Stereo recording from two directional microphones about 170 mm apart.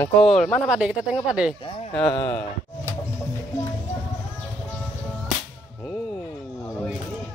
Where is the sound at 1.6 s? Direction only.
30° left (ahead or behind).